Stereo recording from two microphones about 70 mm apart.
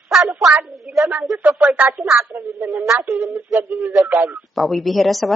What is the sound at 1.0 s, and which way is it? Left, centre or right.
Speech, right.